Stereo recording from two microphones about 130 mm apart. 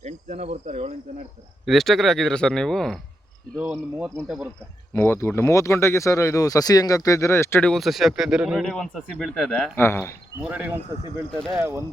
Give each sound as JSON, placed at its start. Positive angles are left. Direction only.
{"t": 0.0, "sound": "cricket", "side_deg": -55}
{"t": 1.6, "sound": "speech", "side_deg": 0}
{"t": 3.6, "sound": "cricket", "side_deg": -15}
{"t": 4.9, "sound": "speech", "side_deg": 20}
{"t": 7.6, "sound": "speech", "side_deg": 0}
{"t": 10.5, "sound": "cricket", "side_deg": -10}
{"t": 11.5, "sound": "speech", "side_deg": -20}